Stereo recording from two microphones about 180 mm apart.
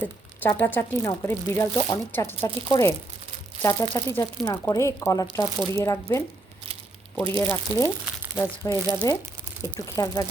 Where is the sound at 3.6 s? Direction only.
20° left (ahead or behind).